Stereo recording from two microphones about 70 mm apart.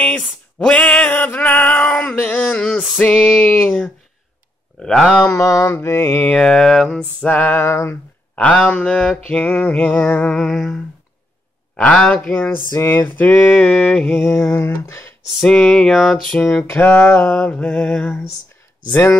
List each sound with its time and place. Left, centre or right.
0.6 s a sound: centre
2.0 s male singing: centre
3.0 s music: centre
5.2 s a sound: left
5.8 s mantra: left
6.3 s music: centre; by 8.0 s left
8.4 s music: centre
9.3 s speech: left
10.3 s music: centre
11.7 s speech: centre
14.8 s speech: left
15.4 s music: centre
16.5 s music: left